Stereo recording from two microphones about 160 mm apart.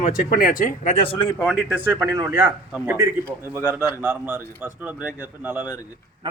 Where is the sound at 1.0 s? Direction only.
35° left (ahead or behind).